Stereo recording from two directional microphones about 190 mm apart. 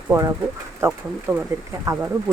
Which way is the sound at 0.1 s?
15° right (ahead or behind).